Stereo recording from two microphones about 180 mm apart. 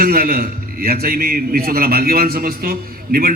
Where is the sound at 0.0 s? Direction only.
55° right (ahead or behind).